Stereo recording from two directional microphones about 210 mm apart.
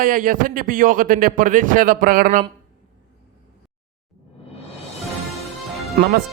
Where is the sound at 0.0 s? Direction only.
40° right (ahead or behind).